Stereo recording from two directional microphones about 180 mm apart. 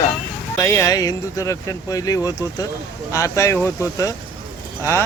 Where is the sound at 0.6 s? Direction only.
20° left (ahead or behind).